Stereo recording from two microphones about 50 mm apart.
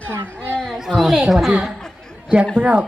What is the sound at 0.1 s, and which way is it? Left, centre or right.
Speech, right.